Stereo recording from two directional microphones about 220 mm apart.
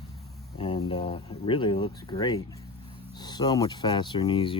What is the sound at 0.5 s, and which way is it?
Speech, 25° left (ahead or behind).